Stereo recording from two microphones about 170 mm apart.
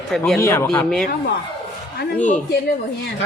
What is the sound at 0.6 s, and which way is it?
Speech, 5° left (ahead or behind).